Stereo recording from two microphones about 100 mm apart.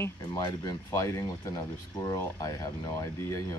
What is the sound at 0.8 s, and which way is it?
Speech, 30° left (ahead or behind).